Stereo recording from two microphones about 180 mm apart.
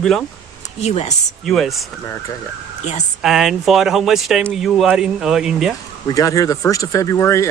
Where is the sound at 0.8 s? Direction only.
35° left (ahead or behind).